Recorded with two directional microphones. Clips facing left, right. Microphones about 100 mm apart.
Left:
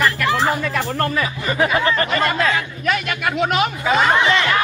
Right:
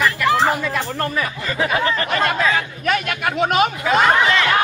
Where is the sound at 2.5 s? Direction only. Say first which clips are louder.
Right 1 dB; 45° right (ahead or behind).